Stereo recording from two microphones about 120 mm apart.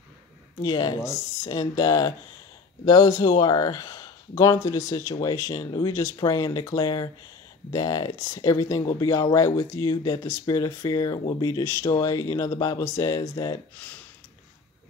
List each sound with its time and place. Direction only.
0.6 s speech: 35° left (ahead or behind)